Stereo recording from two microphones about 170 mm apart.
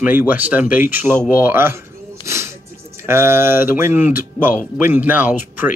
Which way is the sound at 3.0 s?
15° right (ahead or behind).